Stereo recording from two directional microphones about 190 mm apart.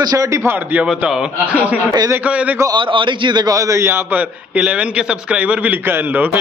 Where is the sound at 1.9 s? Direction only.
20° right (ahead or behind).